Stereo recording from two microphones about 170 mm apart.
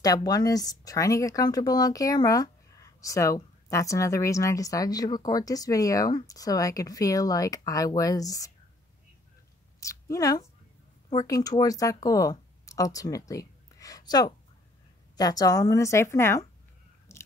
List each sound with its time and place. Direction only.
0.0 s speech: 20° left (ahead or behind)
9.8 s speech: 20° left (ahead or behind)
13.3 s a sound: 20° left (ahead or behind)
15.1 s speech: 20° left (ahead or behind)
17.1 s biting: 15° left (ahead or behind)